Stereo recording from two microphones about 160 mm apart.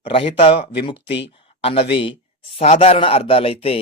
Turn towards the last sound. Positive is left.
turn(degrees=35)  # may be behind; listen again after turning